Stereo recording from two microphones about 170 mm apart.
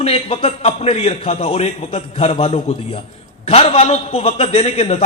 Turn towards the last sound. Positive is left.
turn(degrees=40)  # may be behind; listen again after turning